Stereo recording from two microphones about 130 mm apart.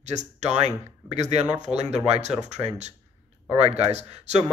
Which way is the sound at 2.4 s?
60° right (ahead or behind).